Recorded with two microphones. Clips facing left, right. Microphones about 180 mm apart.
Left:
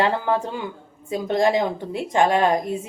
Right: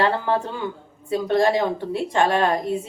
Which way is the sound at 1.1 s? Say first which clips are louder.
Right 1 dB; 15° left (ahead or behind).